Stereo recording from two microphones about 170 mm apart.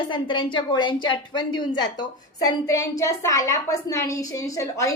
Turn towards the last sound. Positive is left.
turn(degrees=20)  # may be behind; listen again after turning